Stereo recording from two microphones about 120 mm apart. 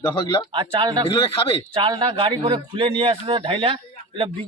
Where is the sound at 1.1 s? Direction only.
45° left (ahead or behind).